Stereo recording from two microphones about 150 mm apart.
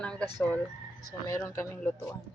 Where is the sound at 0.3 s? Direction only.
10° left (ahead or behind).